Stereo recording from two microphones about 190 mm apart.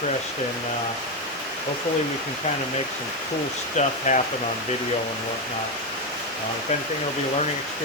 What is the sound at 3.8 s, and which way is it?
Speech, 40° left (ahead or behind).